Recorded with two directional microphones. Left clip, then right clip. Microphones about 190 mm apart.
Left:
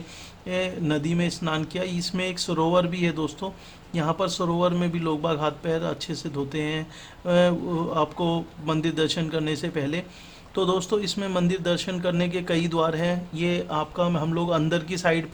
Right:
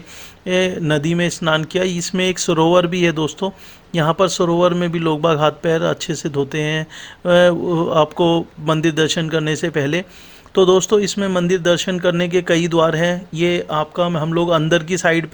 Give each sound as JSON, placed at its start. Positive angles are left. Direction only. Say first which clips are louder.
{"t": 0.4, "sound": "speech", "louder": "right 9 dB", "side_deg": -35}